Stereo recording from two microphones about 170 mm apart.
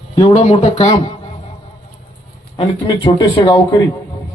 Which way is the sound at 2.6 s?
25° left (ahead or behind).